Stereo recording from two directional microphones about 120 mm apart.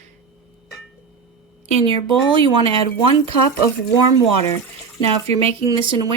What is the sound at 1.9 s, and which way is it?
Speech, 45° right (ahead or behind).